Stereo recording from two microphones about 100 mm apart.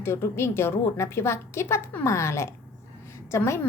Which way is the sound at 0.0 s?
25° left (ahead or behind).